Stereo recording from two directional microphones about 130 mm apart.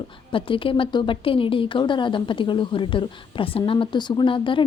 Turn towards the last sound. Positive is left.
turn(degrees=40)  # may be behind; listen again after turning